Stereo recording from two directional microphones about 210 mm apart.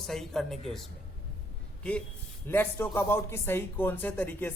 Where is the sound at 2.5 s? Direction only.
10° left (ahead or behind).